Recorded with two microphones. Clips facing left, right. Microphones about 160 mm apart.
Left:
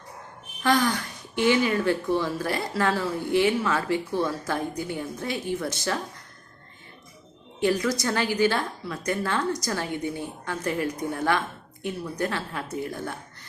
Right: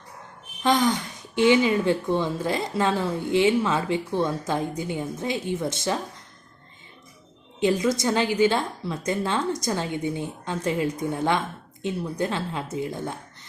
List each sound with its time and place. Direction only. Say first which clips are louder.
0.6 s speech: right 1 dB; 20° right (ahead or behind)
7.6 s speech: right 2 dB; 20° right (ahead or behind)